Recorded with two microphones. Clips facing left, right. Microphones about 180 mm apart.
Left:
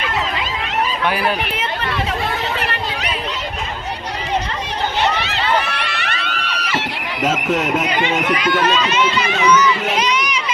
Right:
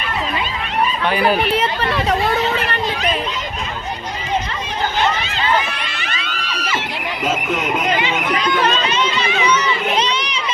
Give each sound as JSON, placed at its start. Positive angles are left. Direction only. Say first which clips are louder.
{"t": 1.5, "sound": "speech", "louder": "right 4 dB", "side_deg": -35}
{"t": 5.1, "sound": "a sound", "louder": "even", "side_deg": 70}
{"t": 8.6, "sound": "speech", "louder": "left 1 dB", "side_deg": -30}